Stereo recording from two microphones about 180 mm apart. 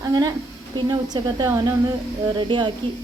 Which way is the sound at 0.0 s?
20° right (ahead or behind).